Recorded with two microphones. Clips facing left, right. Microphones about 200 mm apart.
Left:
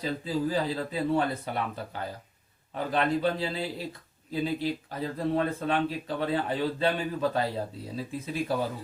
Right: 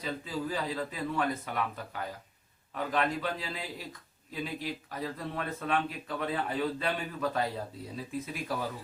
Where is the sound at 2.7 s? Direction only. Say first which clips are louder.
Left 4 dB; 30° left (ahead or behind).